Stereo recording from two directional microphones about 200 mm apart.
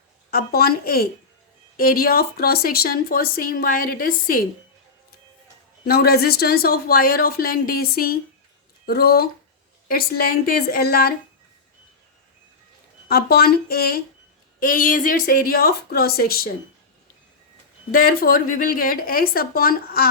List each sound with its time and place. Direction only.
0.3 s speech: 50° left (ahead or behind)
5.8 s speech: 50° left (ahead or behind)
13.1 s speech: 50° left (ahead or behind)
17.9 s speech: 45° left (ahead or behind)